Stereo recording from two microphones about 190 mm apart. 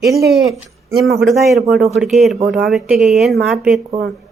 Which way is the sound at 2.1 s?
Centre (ahead or behind).